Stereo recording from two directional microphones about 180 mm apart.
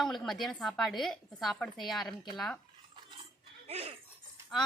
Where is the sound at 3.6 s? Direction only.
35° right (ahead or behind).